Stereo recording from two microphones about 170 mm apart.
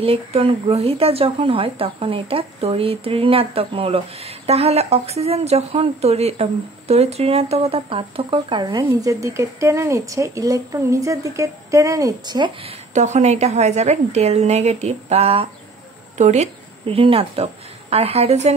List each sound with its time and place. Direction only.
0.0 s speech: 35° right (ahead or behind)
12.9 s a woman's voice: 40° right (ahead or behind)